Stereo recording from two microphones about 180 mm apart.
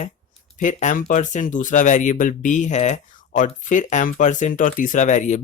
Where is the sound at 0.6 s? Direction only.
45° left (ahead or behind).